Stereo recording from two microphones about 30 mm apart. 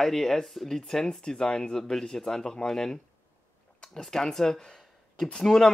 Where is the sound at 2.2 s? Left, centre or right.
Left.